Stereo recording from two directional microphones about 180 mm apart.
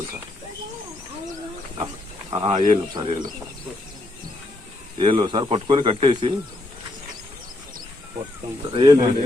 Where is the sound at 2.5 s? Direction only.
40° right (ahead or behind).